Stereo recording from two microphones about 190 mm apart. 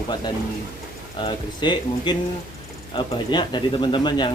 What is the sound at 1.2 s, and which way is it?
Speech, 25° left (ahead or behind).